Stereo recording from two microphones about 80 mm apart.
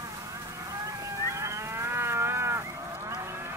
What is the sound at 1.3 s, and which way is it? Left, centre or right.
Moo, right.